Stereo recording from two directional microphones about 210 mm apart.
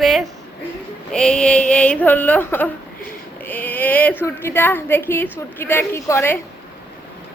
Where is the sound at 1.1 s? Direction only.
5° left (ahead or behind).